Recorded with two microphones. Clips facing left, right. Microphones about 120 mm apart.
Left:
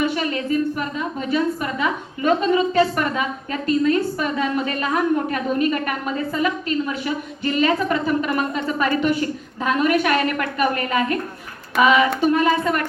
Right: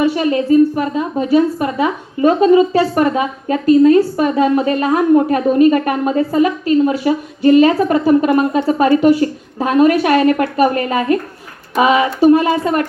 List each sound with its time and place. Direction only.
0.0 s a woman's voice: 35° right (ahead or behind)